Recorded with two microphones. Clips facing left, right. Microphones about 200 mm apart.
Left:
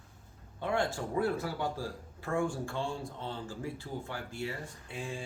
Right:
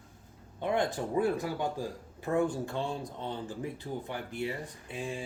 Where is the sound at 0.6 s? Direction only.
20° right (ahead or behind).